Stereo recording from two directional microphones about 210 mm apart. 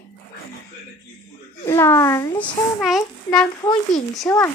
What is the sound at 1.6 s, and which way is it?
Speech, 10° left (ahead or behind).